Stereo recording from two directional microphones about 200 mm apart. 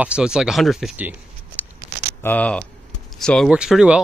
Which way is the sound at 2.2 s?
5° left (ahead or behind).